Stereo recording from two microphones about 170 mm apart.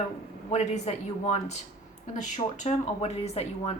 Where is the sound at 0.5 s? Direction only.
40° left (ahead or behind).